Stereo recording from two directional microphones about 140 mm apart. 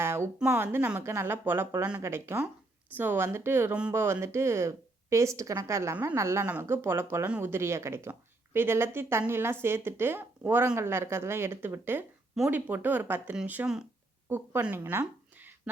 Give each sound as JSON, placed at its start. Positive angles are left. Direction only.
{"t": 0.0, "sound": "speech", "side_deg": -15}